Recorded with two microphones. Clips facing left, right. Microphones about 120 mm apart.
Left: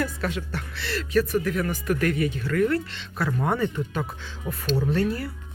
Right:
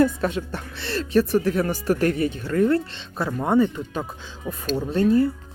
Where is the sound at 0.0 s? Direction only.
25° right (ahead or behind).